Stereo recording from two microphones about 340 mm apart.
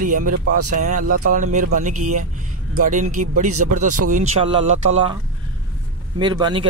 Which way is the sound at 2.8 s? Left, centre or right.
Right.